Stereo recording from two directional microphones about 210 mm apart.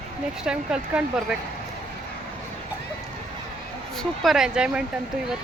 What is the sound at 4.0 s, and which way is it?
Speech, centre (ahead or behind).